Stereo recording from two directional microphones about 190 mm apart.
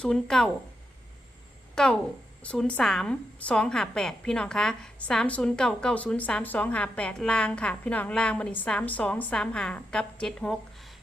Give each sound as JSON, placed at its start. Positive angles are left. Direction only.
{"t": 0.0, "sound": "a woman's voice", "side_deg": 5}
{"t": 1.7, "sound": "a woman's voice", "side_deg": 5}